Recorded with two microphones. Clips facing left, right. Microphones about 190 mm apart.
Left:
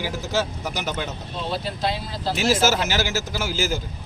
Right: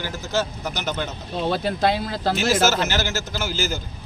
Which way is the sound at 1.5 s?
55° right (ahead or behind).